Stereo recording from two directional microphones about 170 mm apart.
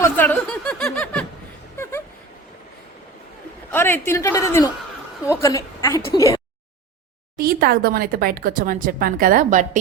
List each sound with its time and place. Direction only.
0.0 s snicker: 10° left (ahead or behind)
1.7 s a sound: 15° left (ahead or behind)
3.7 s a woman's voice: 15° left (ahead or behind)
7.3 s speech: 60° right (ahead or behind)